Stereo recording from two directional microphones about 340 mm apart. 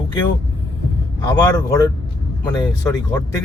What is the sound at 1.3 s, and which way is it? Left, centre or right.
Speech, centre.